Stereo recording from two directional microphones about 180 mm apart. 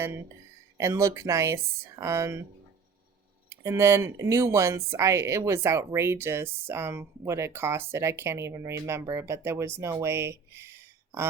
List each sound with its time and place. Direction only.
0.8 s speech: 15° right (ahead or behind)
3.5 s speech: 15° right (ahead or behind)